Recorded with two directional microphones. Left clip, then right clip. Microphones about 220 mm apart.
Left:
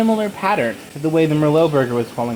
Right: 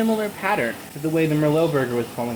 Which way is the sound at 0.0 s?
30° left (ahead or behind).